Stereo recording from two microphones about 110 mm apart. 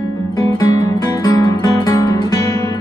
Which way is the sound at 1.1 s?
35° left (ahead or behind).